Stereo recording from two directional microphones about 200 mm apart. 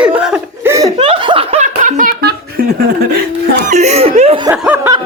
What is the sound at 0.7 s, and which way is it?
Laughter, 20° right (ahead or behind).